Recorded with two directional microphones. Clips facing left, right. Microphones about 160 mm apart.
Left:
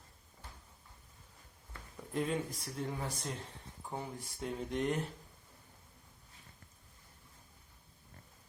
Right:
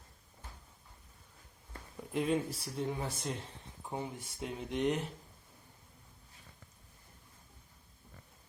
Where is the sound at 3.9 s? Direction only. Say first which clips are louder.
Right 2 dB; 15° right (ahead or behind).